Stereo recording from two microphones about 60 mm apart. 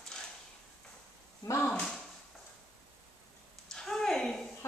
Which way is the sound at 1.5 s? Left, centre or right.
Left.